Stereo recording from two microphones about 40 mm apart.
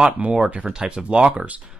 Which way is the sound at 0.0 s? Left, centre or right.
Right.